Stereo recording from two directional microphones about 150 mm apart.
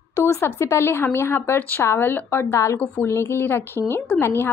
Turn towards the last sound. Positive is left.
turn(degrees=15)  # may be behind; listen again after turning